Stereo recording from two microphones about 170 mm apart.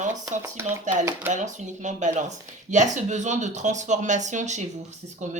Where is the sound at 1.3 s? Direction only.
45° right (ahead or behind).